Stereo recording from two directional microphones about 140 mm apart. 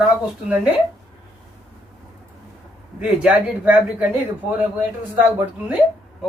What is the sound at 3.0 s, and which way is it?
Speech, 10° right (ahead or behind).